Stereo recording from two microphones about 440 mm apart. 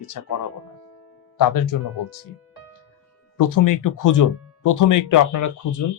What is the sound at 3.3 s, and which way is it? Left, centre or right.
Speech, left.